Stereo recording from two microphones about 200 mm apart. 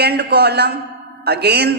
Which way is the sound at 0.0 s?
55° right (ahead or behind).